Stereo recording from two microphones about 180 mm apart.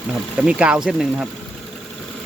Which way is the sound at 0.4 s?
5° right (ahead or behind).